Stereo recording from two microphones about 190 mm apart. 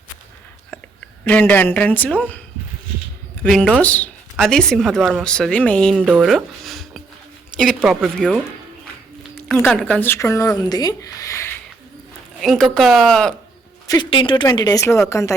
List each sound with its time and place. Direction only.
1.2 s speech: 10° left (ahead or behind)
3.4 s a woman's voice: 5° left (ahead or behind)
6.1 s a sound: 5° right (ahead or behind)
7.5 s a woman's voice: centre (ahead or behind)
12.4 s a woman's voice: centre (ahead or behind)
13.8 s speech: 20° left (ahead or behind)